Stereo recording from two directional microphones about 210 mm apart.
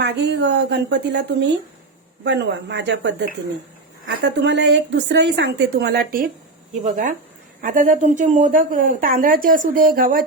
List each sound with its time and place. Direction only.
0.0 s a woman's voice: 55° right (ahead or behind)